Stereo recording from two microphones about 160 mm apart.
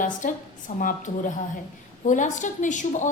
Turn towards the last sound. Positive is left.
turn(degrees=50)  # may be behind; listen again after turning